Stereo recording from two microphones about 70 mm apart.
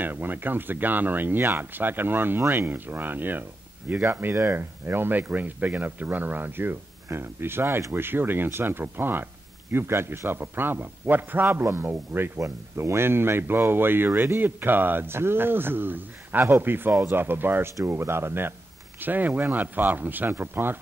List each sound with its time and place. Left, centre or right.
0.0 s speech: right
12.4 s speech: right